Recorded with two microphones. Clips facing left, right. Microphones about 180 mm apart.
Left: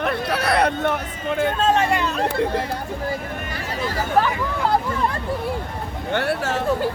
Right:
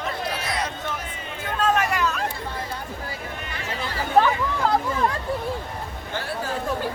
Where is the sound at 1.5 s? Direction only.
25° left (ahead or behind).